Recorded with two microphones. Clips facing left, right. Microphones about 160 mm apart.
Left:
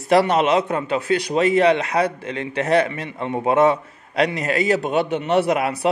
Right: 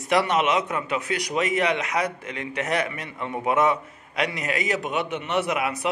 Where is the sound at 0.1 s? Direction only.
35° left (ahead or behind).